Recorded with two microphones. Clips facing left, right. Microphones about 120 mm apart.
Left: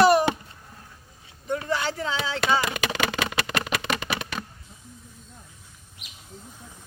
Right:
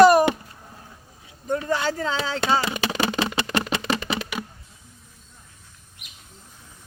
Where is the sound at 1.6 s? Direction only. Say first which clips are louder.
Right 3 dB; 40° right (ahead or behind).